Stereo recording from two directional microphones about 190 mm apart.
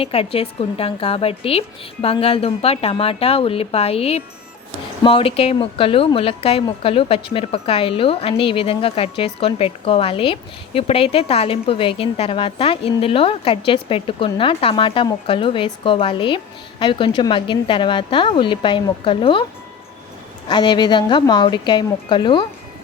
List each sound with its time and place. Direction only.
0.0 s a woman's voice: 30° left (ahead or behind)
20.5 s a woman's voice: 25° left (ahead or behind)